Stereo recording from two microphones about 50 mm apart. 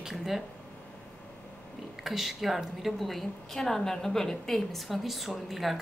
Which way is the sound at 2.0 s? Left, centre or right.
Centre.